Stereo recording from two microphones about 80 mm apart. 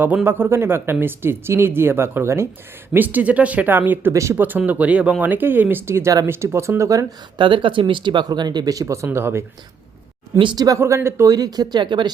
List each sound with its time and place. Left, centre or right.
0.3 s speech: right
2.9 s speech: right
4.1 s speech: right
4.4 s speech: right
7.3 s speech: right
8.3 s speech: right
9.0 s speech: right
10.3 s speech: right
10.8 s speech: right